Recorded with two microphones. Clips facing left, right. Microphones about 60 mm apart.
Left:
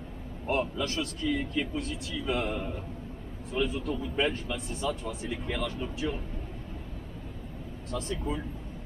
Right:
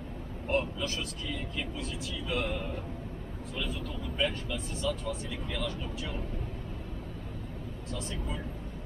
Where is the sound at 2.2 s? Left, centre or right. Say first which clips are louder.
Left 2 dB; left.